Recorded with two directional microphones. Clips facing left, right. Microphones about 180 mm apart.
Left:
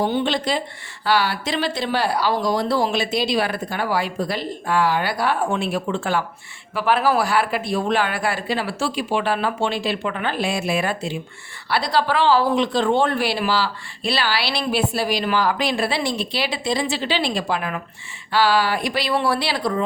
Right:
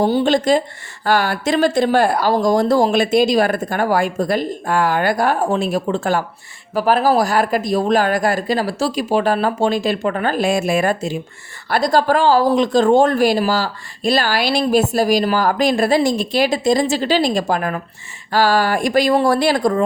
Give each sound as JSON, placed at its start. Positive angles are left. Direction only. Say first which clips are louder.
{"t": 0.0, "sound": "speech", "louder": "right 6 dB", "side_deg": -40}